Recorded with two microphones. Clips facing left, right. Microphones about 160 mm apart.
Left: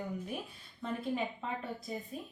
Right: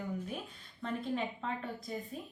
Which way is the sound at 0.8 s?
5° left (ahead or behind).